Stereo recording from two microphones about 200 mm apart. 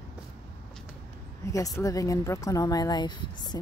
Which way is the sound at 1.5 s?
15° left (ahead or behind).